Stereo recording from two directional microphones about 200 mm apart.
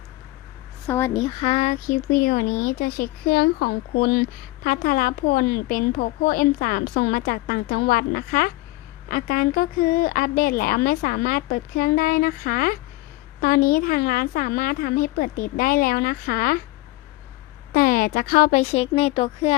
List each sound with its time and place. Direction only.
0.9 s a woman's voice: 15° left (ahead or behind)
1.5 s a woman's voice: 35° left (ahead or behind)
17.7 s speech: 45° left (ahead or behind); by 19.5 s 30° left (ahead or behind)